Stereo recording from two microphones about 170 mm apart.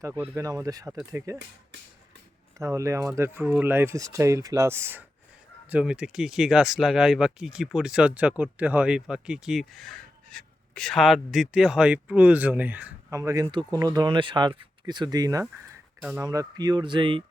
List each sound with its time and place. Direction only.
0.0 s speech: 15° right (ahead or behind)
2.6 s speech: 20° right (ahead or behind)
16.0 s speech: 10° right (ahead or behind)
16.2 s speech: 20° right (ahead or behind)